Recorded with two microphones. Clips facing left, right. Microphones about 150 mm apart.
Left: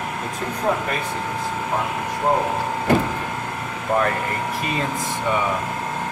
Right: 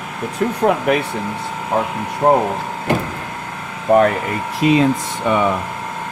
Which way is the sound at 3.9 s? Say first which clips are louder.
Right 9 dB; 65° right (ahead or behind).